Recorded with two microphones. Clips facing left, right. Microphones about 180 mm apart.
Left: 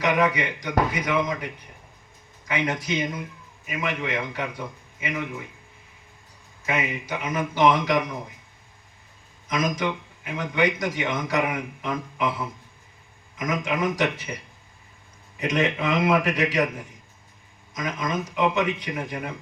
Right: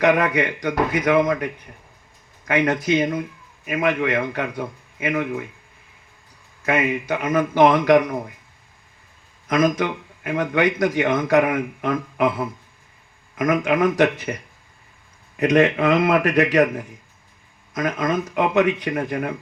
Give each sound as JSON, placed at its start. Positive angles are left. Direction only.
{"t": 0.0, "sound": "a man's voice", "side_deg": -55}
{"t": 6.7, "sound": "a man's voice", "side_deg": -55}
{"t": 9.5, "sound": "a man's voice", "side_deg": -55}